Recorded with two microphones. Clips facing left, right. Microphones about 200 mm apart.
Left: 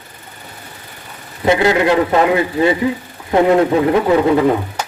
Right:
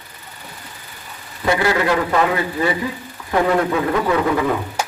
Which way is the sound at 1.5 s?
20° left (ahead or behind).